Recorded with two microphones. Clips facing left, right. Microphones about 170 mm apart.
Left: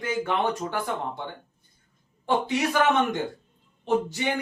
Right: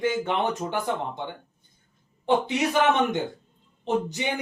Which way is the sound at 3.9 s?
20° right (ahead or behind).